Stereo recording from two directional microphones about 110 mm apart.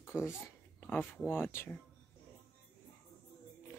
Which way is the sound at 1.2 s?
20° left (ahead or behind).